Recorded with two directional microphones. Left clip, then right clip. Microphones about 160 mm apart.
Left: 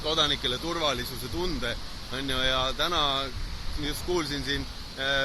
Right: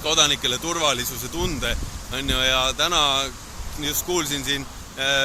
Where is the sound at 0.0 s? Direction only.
10° right (ahead or behind).